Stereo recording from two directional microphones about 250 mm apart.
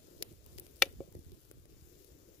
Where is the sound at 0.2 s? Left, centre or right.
Left.